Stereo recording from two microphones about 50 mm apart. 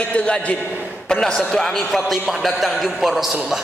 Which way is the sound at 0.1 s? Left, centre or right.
Left.